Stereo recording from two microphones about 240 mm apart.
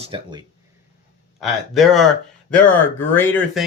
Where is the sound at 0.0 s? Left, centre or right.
Right.